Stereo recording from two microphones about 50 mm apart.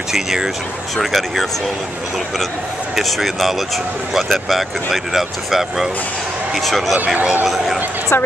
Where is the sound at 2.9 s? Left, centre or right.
Centre.